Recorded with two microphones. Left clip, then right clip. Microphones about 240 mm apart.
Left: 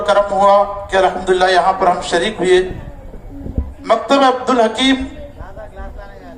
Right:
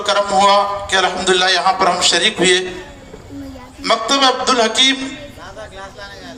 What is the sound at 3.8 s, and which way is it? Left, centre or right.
A man's voice, right.